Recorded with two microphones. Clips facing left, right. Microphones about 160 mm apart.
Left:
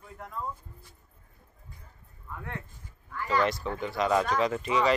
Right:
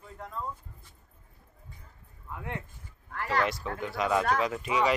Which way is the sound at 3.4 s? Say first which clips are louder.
Left 2 dB; 5° right (ahead or behind).